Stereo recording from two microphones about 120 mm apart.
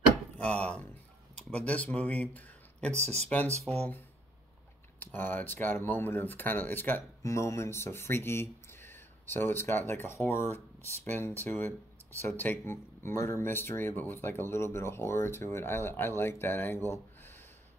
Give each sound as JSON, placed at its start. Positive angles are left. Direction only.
{"t": 0.4, "sound": "speech", "side_deg": 10}
{"t": 3.0, "sound": "speech", "side_deg": -65}
{"t": 3.7, "sound": "speech", "side_deg": 5}
{"t": 5.0, "sound": "speech", "side_deg": 15}